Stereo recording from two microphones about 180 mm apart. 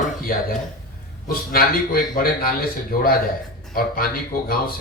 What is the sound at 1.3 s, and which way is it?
A man's voice, 55° left (ahead or behind).